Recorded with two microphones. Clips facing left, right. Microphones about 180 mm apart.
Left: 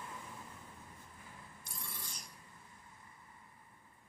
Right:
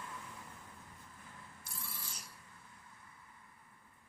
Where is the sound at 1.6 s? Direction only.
5° right (ahead or behind).